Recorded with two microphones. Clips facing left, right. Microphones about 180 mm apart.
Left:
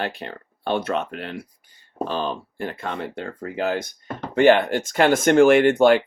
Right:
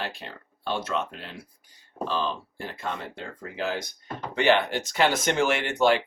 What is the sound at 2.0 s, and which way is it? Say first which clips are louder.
Speech: left 1 dB; 55° left (ahead or behind).